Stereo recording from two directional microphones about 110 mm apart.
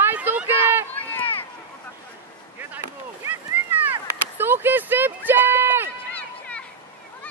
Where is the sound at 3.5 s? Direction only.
15° right (ahead or behind).